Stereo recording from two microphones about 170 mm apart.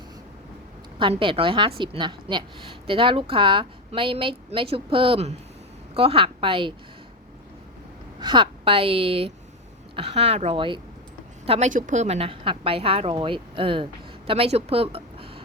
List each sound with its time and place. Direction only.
0.9 s a woman's voice: 30° right (ahead or behind)
8.2 s a woman's voice: 25° right (ahead or behind)
11.7 s a woman's voice: 50° right (ahead or behind)